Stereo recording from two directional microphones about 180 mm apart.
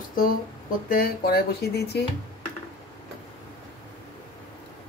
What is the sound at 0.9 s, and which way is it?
Speech, 55° left (ahead or behind).